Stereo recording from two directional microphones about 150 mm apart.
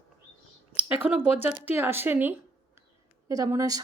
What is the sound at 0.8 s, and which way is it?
A woman's voice, 10° right (ahead or behind).